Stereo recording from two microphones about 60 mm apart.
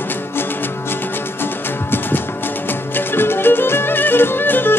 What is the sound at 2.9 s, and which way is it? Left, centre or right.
Music, left.